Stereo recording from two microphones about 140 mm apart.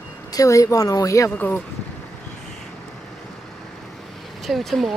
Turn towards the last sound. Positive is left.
turn(degrees=0)  # may be behind; listen again after turning